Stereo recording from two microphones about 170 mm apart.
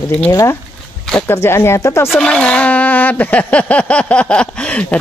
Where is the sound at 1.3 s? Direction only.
15° left (ahead or behind).